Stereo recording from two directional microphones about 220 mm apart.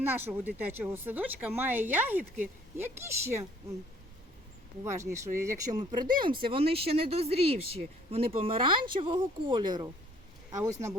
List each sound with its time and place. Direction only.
0.0 s speech: 10° right (ahead or behind)
4.8 s speech: 15° right (ahead or behind)